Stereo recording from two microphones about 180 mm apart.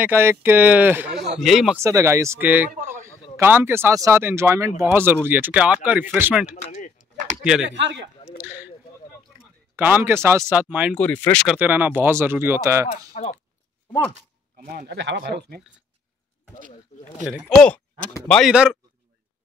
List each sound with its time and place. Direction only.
0.0 s speech: 15° right (ahead or behind)
1.8 s a man's voice: 15° right (ahead or behind)
6.5 s speech: 45° left (ahead or behind)
7.0 s a sound: 45° right (ahead or behind)
7.7 s a man's voice: 85° right
8.4 s speech: 10° right (ahead or behind)
9.8 s speech: 10° right (ahead or behind)
11.0 s speech: 10° left (ahead or behind)
11.4 s speech: 10° right (ahead or behind)
12.8 s speech: 40° left (ahead or behind)
14.7 s speech: 60° right (ahead or behind)
16.9 s a sound: 40° left (ahead or behind)
17.6 s speech: 5° left (ahead or behind)